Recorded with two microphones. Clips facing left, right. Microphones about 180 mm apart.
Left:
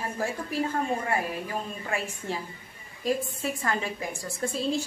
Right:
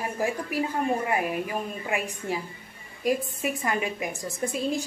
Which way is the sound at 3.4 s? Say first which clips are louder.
Right 2 dB; 15° right (ahead or behind).